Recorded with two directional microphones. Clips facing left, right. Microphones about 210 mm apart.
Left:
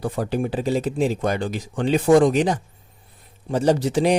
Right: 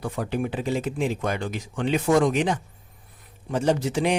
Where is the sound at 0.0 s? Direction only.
35° left (ahead or behind).